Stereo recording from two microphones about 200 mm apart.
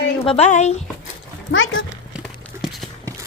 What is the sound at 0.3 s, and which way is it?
Speech, 35° left (ahead or behind).